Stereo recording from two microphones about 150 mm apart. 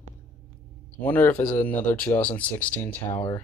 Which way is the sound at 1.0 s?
15° left (ahead or behind).